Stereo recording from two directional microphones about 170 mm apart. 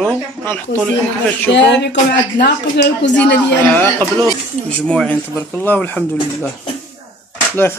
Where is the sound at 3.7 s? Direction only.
10° left (ahead or behind).